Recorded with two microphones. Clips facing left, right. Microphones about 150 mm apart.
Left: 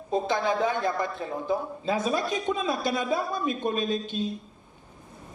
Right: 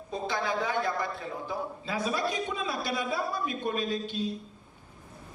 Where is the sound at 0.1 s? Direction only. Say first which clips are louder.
Left 6 dB; 20° left (ahead or behind).